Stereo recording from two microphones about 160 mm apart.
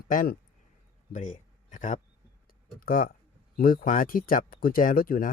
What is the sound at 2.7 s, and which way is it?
Speech, 65° left (ahead or behind).